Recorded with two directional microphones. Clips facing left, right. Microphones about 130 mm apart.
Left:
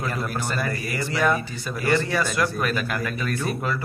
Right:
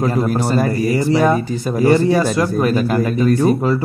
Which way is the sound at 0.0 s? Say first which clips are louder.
Right 11 dB; 35° right (ahead or behind).